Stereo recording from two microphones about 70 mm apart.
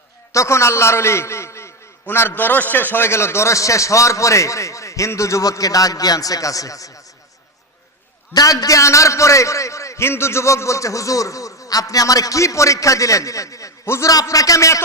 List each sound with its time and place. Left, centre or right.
0.3 s a man's voice: left
2.0 s a man's voice: left
8.3 s a man's voice: left
13.8 s a man's voice: left
14.1 s a man's voice: left